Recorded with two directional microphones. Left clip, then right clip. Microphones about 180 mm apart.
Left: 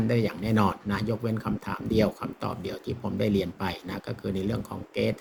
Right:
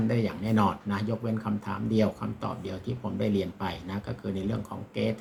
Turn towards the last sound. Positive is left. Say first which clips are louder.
# left 3 dB
turn(degrees=45)  # may be behind; listen again after turning